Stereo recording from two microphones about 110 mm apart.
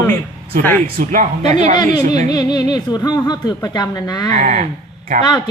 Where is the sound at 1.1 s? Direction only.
90° right.